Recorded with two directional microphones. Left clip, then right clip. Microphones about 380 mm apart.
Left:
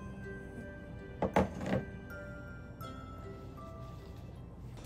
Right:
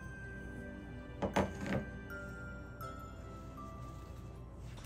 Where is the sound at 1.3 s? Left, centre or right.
Left.